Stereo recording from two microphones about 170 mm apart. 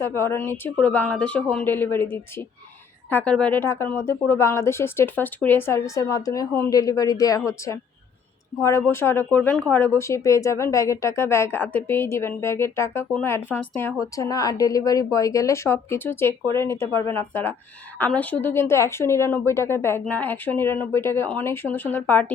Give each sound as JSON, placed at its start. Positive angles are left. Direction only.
{"t": 0.0, "sound": "speech", "side_deg": 15}
{"t": 8.9, "sound": "speech", "side_deg": 15}